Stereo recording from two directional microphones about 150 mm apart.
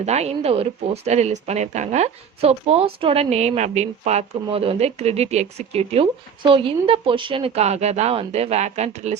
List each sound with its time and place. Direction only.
0.0 s speech: 45° right (ahead or behind)